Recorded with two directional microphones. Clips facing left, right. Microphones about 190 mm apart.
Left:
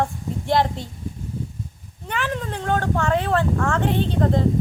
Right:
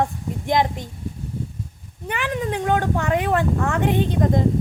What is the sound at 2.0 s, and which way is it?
Speech, 15° right (ahead or behind).